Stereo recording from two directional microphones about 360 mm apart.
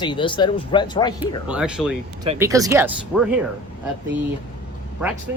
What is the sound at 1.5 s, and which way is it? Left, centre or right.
Speech, centre.